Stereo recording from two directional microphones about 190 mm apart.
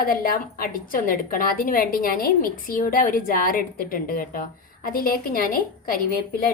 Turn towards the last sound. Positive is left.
turn(degrees=50)  # may be behind; listen again after turning